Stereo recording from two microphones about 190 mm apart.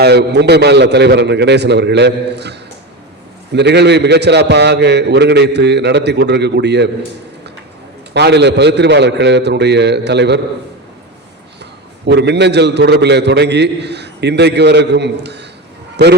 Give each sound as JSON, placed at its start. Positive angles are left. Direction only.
{"t": 0.0, "sound": "a man's voice", "side_deg": -60}
{"t": 8.1, "sound": "a man's voice", "side_deg": -65}
{"t": 11.6, "sound": "a man's voice", "side_deg": -60}